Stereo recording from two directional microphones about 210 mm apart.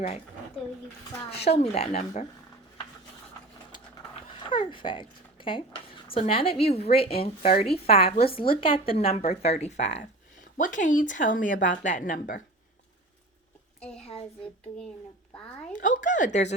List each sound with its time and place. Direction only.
1.4 s speech: 30° left (ahead or behind)
3.7 s a sound: 25° left (ahead or behind)
7.0 s speech: 25° left (ahead or behind)
13.7 s a child's voice: 5° left (ahead or behind)
15.7 s speech: 40° left (ahead or behind)